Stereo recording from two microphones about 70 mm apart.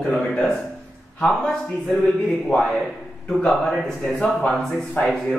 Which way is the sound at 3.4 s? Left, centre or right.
Centre.